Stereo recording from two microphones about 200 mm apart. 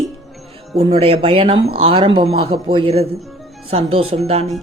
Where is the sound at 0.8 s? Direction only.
30° right (ahead or behind).